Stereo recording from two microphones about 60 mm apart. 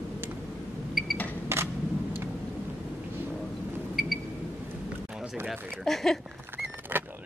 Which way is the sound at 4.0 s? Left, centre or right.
Centre.